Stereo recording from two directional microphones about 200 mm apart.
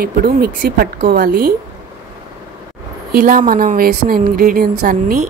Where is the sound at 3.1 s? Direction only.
45° right (ahead or behind).